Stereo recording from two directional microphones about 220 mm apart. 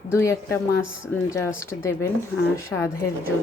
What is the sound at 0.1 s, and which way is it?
A woman's voice, 10° left (ahead or behind).